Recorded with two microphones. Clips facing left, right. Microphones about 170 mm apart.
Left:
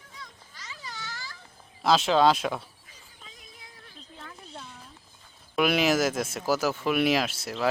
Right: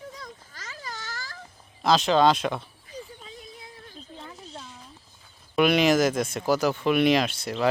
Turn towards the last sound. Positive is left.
turn(degrees=5)  # may be behind; listen again after turning